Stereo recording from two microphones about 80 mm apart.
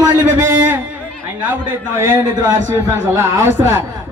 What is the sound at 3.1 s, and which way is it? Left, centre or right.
Speech, right.